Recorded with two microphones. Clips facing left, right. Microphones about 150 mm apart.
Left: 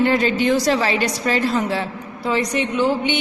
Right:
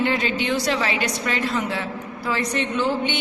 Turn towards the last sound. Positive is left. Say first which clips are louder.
# left 4 dB
turn(degrees=15)  # may be behind; listen again after turning